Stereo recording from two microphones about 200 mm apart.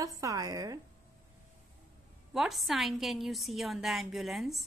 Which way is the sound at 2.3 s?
Centre (ahead or behind).